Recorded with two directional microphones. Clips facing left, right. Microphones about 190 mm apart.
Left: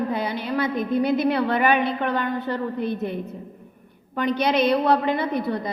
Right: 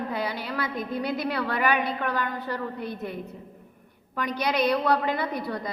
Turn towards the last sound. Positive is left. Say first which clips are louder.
# left 5 dB
turn(degrees=25)  # may be behind; listen again after turning